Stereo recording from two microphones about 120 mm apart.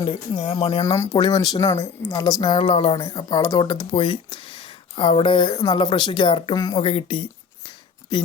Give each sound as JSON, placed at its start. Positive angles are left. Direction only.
{"t": 0.0, "sound": "speech", "side_deg": 50}
{"t": 0.6, "sound": "speech", "side_deg": 65}
{"t": 0.9, "sound": "speech", "side_deg": 25}
{"t": 2.4, "sound": "speech", "side_deg": 45}
{"t": 3.2, "sound": "speech", "side_deg": 35}
{"t": 6.6, "sound": "speech", "side_deg": 30}
{"t": 6.8, "sound": "speech", "side_deg": 50}